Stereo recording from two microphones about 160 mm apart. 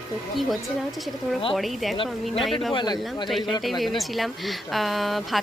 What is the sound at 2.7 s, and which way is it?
Speech, 25° left (ahead or behind).